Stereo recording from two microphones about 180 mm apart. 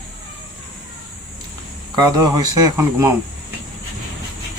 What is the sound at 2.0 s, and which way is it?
Speech, 20° right (ahead or behind).